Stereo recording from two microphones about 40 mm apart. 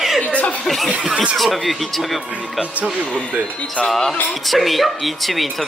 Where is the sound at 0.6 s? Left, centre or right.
Centre.